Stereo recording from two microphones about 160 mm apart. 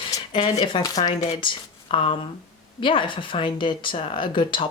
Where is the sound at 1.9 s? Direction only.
35° left (ahead or behind).